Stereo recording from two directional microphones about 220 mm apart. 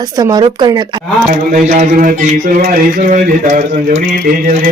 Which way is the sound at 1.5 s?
35° right (ahead or behind).